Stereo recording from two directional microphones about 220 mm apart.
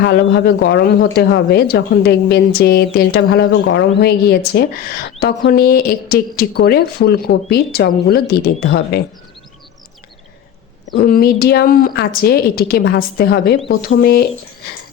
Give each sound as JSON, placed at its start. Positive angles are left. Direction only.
{"t": 0.0, "sound": "speech", "side_deg": 50}
{"t": 11.0, "sound": "speech", "side_deg": 45}